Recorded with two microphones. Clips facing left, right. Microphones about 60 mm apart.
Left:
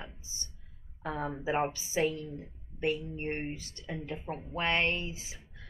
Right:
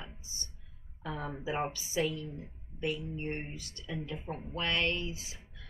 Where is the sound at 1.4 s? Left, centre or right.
Left.